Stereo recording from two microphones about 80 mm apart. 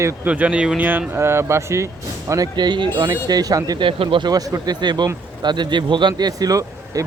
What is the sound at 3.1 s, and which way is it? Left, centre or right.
Speech, right.